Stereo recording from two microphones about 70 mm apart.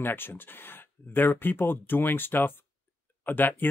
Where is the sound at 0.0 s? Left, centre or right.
Left.